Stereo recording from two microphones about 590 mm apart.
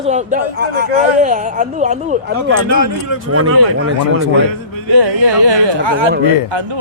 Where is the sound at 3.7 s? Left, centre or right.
Centre.